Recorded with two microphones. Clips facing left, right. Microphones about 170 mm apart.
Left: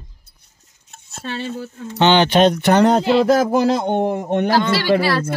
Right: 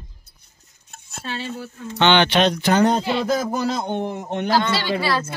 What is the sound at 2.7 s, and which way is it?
A man's voice, 75° left (ahead or behind).